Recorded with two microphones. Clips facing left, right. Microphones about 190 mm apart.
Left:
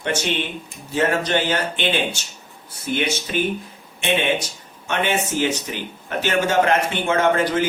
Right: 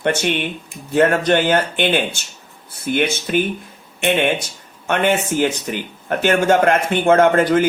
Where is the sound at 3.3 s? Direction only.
55° right (ahead or behind).